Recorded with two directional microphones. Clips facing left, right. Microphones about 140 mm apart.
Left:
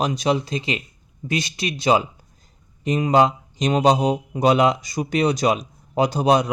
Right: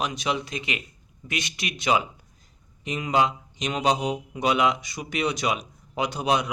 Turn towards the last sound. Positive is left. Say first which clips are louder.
# left 7 dB
turn(degrees=35)  # may be behind; listen again after turning